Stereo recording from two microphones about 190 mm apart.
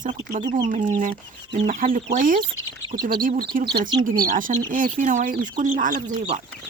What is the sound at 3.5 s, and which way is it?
Speech, 50° right (ahead or behind).